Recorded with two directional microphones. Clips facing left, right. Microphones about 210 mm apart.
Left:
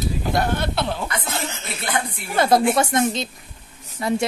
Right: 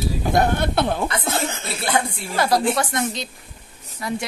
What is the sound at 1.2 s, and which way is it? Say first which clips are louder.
Chuckle: right 4 dB; 50° right (ahead or behind).